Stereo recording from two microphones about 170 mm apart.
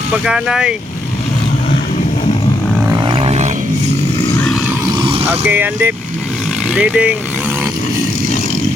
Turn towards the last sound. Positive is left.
turn(degrees=-5)  # may be behind; listen again after turning